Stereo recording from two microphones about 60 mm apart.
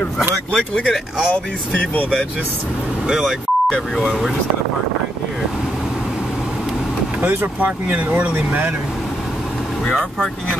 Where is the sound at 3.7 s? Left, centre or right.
Centre.